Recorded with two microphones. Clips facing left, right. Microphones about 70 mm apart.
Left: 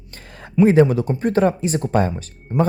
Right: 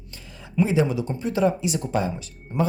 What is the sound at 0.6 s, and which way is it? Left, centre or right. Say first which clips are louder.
Speech: left 9 dB; left.